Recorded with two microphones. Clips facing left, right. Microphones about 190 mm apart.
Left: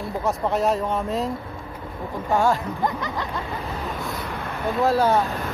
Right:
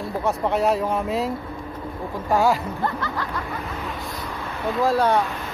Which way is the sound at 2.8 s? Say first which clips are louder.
Left 1 dB; 20° left (ahead or behind).